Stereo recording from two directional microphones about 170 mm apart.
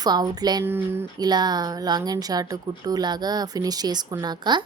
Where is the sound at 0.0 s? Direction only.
25° right (ahead or behind).